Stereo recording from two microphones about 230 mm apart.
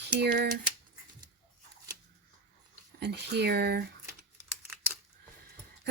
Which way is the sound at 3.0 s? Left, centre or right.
Right.